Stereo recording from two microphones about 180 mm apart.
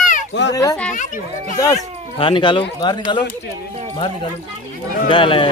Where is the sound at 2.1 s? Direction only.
30° left (ahead or behind).